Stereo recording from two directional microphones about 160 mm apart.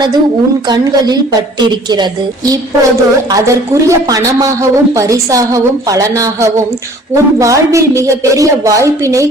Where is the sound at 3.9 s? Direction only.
20° right (ahead or behind).